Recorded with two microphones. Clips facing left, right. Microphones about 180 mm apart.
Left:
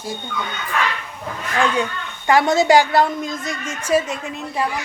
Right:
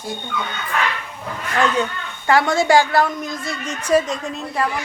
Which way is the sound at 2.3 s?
20° left (ahead or behind).